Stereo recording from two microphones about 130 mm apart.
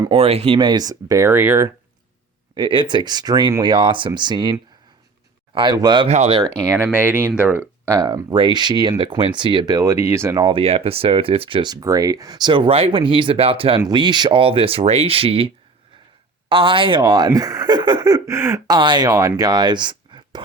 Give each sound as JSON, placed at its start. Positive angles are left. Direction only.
{"t": 0.1, "sound": "speech", "side_deg": -50}
{"t": 2.6, "sound": "speech", "side_deg": -40}
{"t": 5.5, "sound": "speech", "side_deg": -35}
{"t": 6.1, "sound": "speech", "side_deg": -55}
{"t": 7.0, "sound": "speech", "side_deg": -10}
{"t": 8.0, "sound": "speech", "side_deg": -35}
{"t": 10.4, "sound": "speech", "side_deg": -45}
{"t": 18.7, "sound": "speech", "side_deg": -35}